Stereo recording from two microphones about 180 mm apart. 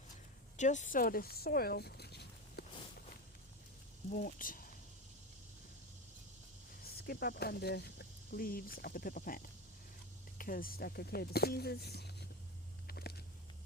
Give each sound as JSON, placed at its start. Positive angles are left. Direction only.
{"t": 0.5, "sound": "speech", "side_deg": 40}
{"t": 4.1, "sound": "speech", "side_deg": 50}
{"t": 6.8, "sound": "speech", "side_deg": 55}
{"t": 12.9, "sound": "a sound", "side_deg": 60}